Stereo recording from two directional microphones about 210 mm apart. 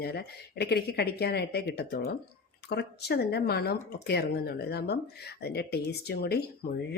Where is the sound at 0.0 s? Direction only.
50° left (ahead or behind).